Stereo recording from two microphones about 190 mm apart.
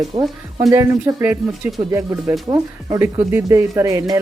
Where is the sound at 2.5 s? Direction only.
15° right (ahead or behind).